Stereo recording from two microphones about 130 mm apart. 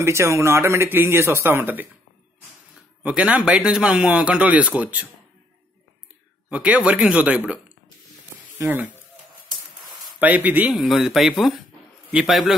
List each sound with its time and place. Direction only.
0.0 s speech: 20° right (ahead or behind)
3.0 s a man's voice: 10° right (ahead or behind)
6.5 s a man's voice: 10° right (ahead or behind)
10.2 s a man's voice: 15° right (ahead or behind)
10.7 s speech: centre (ahead or behind)